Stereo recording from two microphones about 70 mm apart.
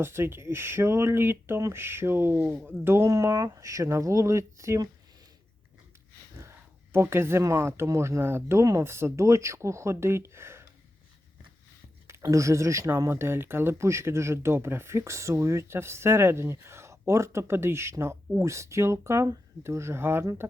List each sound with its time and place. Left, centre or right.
0.0 s speech: right
3.1 s speech: right
6.9 s speech: right
12.2 s speech: right